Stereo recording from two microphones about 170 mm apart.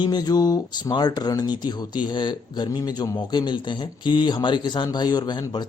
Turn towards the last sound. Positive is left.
turn(degrees=25)  # may be behind; listen again after turning